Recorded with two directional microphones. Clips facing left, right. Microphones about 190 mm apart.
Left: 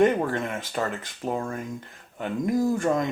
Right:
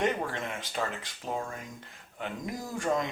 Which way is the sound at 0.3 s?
55° left (ahead or behind).